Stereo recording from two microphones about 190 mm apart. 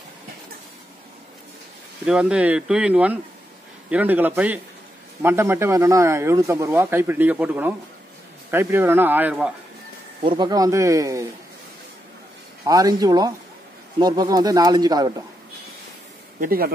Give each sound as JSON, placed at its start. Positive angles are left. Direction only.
{"t": 2.0, "sound": "speech", "side_deg": -5}
{"t": 10.2, "sound": "speech", "side_deg": -25}
{"t": 12.6, "sound": "speech", "side_deg": -20}
{"t": 16.3, "sound": "speech", "side_deg": -50}